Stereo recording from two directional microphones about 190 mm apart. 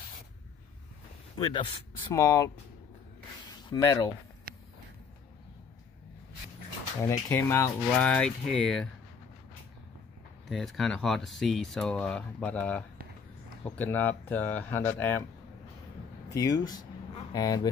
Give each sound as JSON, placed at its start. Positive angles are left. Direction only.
{"t": 1.3, "sound": "speech", "side_deg": 25}
{"t": 3.7, "sound": "speech", "side_deg": 20}
{"t": 4.5, "sound": "a sound", "side_deg": -50}
{"t": 7.0, "sound": "speech", "side_deg": 15}
{"t": 10.5, "sound": "speech", "side_deg": 0}
{"t": 16.3, "sound": "speech", "side_deg": 20}
{"t": 17.2, "sound": "a sound", "side_deg": 20}